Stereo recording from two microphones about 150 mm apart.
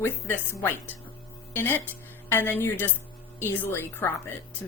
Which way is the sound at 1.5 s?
15° left (ahead or behind).